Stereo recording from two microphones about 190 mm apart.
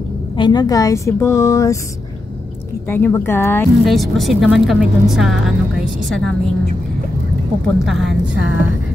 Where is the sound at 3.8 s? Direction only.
Centre (ahead or behind).